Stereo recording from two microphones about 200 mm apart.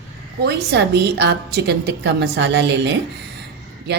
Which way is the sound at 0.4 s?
55° right (ahead or behind).